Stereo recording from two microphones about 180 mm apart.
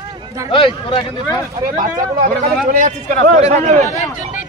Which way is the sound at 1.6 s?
50° right (ahead or behind).